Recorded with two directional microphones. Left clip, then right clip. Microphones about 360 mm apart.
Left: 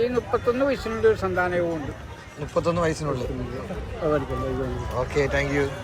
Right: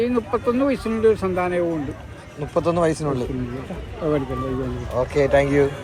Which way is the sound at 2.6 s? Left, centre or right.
Centre.